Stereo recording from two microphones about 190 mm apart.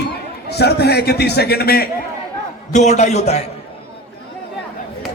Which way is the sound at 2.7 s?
35° left (ahead or behind).